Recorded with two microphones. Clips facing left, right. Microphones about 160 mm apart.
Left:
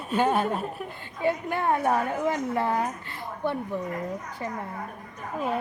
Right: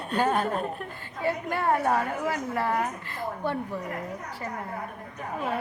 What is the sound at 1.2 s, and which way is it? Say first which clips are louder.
A woman's voice: left 2 dB; 15° left (ahead or behind).